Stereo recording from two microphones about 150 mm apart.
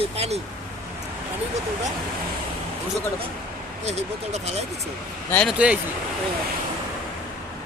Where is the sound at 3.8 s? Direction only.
45° right (ahead or behind).